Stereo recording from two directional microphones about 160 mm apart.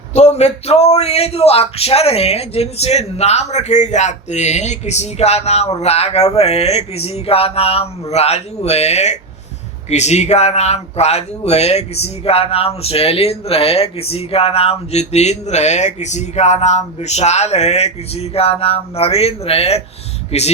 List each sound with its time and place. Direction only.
0.1 s speech: 45° left (ahead or behind)